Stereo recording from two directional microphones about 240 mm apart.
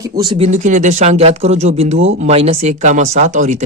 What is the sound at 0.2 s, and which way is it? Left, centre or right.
Speech, right.